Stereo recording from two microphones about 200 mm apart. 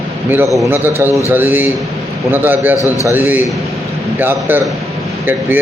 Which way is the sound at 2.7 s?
15° left (ahead or behind).